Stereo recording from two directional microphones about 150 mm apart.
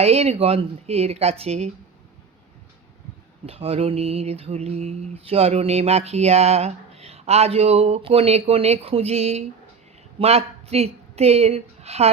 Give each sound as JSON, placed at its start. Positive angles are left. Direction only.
{"t": 0.0, "sound": "mantra", "side_deg": -45}
{"t": 3.4, "sound": "mantra", "side_deg": -40}
{"t": 10.2, "sound": "speech", "side_deg": -45}